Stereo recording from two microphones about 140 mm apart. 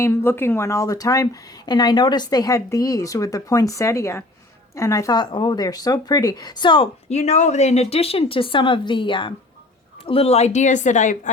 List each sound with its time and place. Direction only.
0.0 s speech: 20° left (ahead or behind); by 6.8 s 35° left (ahead or behind)
7.1 s speech: 55° left (ahead or behind)